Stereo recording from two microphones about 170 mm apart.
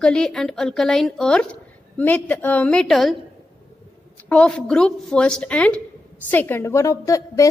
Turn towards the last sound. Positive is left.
turn(degrees=20)  # may be behind; listen again after turning